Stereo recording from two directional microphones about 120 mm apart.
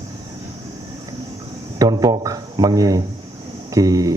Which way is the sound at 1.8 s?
30° right (ahead or behind).